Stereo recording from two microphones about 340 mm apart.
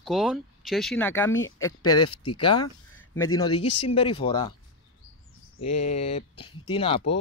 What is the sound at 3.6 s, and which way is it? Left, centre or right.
Speech, left.